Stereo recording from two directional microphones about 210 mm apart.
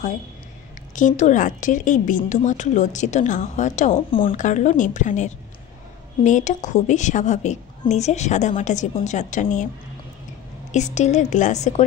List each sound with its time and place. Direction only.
0.9 s a woman's voice: 35° left (ahead or behind)
10.7 s a woman's voice: 35° left (ahead or behind)